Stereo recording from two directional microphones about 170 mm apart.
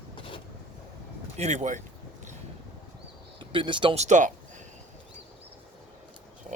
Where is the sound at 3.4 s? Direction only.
30° right (ahead or behind).